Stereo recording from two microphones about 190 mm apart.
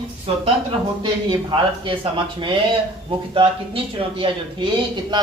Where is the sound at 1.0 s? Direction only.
25° right (ahead or behind).